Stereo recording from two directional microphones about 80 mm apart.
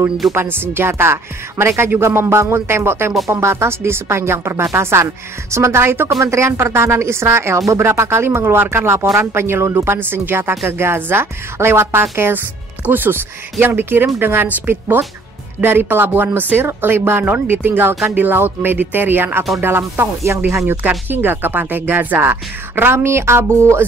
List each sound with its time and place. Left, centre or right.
0.3 s a woman's voice: right